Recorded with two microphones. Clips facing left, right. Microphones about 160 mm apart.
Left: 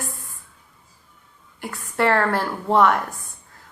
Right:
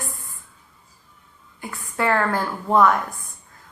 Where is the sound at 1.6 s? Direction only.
70° left (ahead or behind).